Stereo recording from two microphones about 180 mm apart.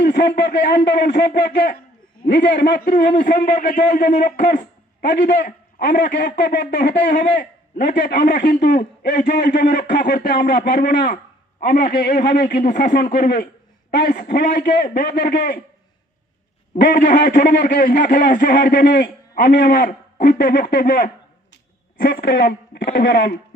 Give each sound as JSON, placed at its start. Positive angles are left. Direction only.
{"t": 0.0, "sound": "a man's voice", "side_deg": 65}
{"t": 2.2, "sound": "a man's voice", "side_deg": 70}
{"t": 3.5, "sound": "a man's voice", "side_deg": 50}
{"t": 10.4, "sound": "a man's voice", "side_deg": 60}
{"t": 14.2, "sound": "a man's voice", "side_deg": 70}
{"t": 16.8, "sound": "a man's voice", "side_deg": 55}
{"t": 21.5, "sound": "a sound", "side_deg": 55}
{"t": 23.0, "sound": "speech", "side_deg": 80}